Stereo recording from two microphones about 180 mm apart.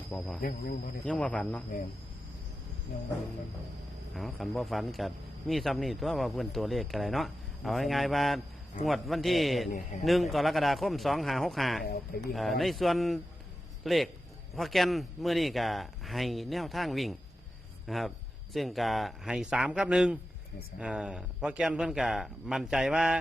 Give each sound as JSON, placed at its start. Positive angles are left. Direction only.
{"t": 0.1, "sound": "speech", "side_deg": 5}
{"t": 4.1, "sound": "speech", "side_deg": 0}